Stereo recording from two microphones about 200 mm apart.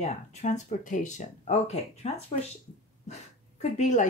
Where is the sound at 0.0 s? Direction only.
35° left (ahead or behind).